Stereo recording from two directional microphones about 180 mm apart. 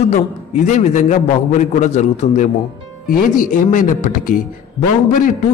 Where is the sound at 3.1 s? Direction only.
50° left (ahead or behind).